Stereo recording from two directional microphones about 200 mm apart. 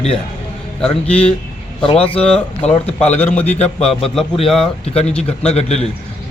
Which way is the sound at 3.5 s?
30° left (ahead or behind).